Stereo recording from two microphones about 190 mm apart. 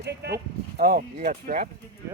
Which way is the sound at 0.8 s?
45° right (ahead or behind).